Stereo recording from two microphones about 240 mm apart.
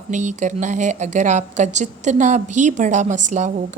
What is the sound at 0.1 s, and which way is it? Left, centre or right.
A woman's voice, right.